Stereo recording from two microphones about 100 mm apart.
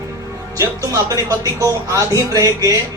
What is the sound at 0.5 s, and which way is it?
Speech, 35° right (ahead or behind).